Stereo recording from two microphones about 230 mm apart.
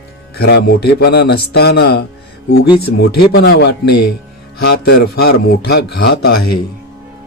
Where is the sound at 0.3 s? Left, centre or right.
Left.